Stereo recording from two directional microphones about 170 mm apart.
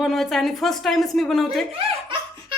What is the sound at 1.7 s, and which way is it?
Speech, 30° right (ahead or behind).